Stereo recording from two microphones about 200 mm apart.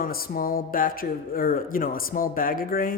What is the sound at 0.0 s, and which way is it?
Speech, 45° left (ahead or behind).